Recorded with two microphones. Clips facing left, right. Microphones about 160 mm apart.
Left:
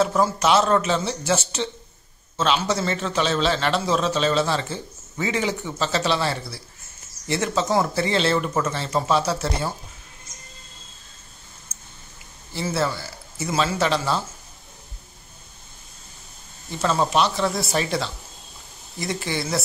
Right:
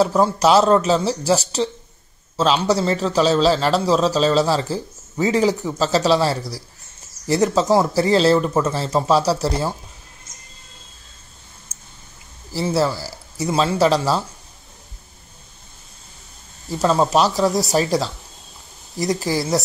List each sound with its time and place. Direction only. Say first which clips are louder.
0.0 s a man's voice: right 4 dB; 35° right (ahead or behind)
12.5 s a man's voice: right 5 dB; 35° right (ahead or behind)
16.7 s a man's voice: right 4 dB; 35° right (ahead or behind)